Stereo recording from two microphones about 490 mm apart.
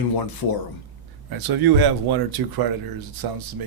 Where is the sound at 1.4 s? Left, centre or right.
Right.